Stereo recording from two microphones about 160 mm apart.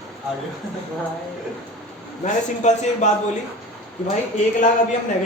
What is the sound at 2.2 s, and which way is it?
Speech, 45° left (ahead or behind).